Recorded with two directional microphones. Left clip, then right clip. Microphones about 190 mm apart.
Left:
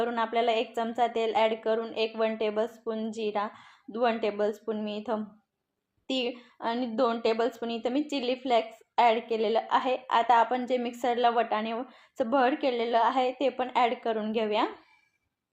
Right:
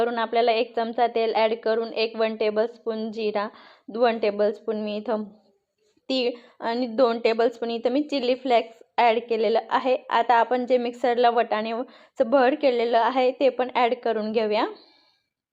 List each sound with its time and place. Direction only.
0.0 s a woman's voice: 5° right (ahead or behind)